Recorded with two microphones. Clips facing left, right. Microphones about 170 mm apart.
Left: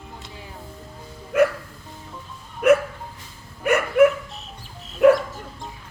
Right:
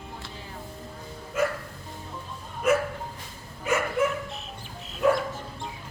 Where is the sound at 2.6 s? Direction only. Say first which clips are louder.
Left 7 dB; 65° left (ahead or behind).